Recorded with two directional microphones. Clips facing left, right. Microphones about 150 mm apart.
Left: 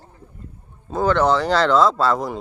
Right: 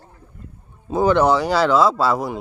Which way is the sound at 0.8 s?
15° right (ahead or behind).